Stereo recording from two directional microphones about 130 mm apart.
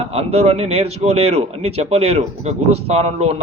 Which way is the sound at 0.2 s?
50° right (ahead or behind).